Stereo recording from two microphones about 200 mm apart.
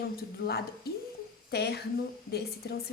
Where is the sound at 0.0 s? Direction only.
50° left (ahead or behind).